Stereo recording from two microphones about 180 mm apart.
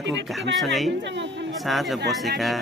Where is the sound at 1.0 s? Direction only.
85° right.